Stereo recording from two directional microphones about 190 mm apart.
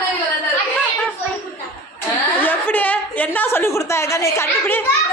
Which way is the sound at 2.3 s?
10° left (ahead or behind).